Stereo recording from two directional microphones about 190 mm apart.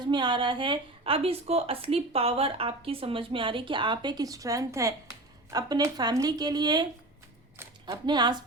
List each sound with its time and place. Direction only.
0.1 s a woman's voice: 25° right (ahead or behind)
7.9 s a woman's voice: 20° right (ahead or behind)